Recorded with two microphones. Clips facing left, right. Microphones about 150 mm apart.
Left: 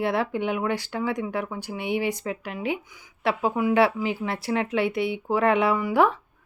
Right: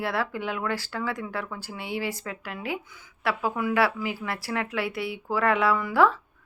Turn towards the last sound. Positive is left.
turn(degrees=20)  # may be behind; listen again after turning